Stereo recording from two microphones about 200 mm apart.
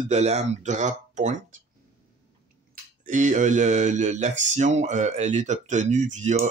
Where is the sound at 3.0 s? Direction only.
40° right (ahead or behind).